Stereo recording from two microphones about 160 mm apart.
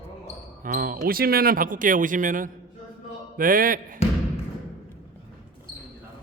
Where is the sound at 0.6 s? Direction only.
60° right (ahead or behind).